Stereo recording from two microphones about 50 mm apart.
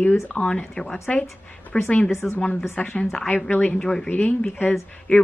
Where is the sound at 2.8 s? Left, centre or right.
Left.